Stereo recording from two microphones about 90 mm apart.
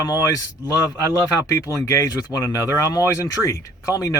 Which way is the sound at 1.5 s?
40° left (ahead or behind).